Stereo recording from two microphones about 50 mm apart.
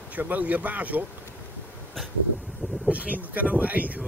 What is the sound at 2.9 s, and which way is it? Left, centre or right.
Speech, right.